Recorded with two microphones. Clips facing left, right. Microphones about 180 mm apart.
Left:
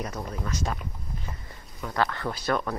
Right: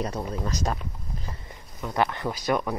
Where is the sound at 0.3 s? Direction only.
40° right (ahead or behind).